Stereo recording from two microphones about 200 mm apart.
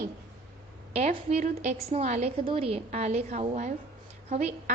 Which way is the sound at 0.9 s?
30° right (ahead or behind).